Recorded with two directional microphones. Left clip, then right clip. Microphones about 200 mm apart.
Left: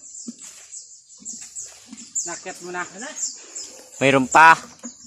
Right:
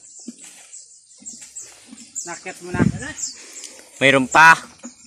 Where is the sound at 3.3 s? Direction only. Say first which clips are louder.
Even; 5° left (ahead or behind).